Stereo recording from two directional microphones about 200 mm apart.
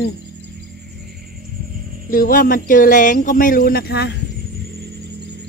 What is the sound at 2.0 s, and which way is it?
Speech, 45° left (ahead or behind).